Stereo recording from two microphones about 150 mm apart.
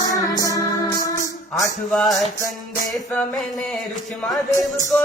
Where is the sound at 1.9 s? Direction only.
Centre (ahead or behind).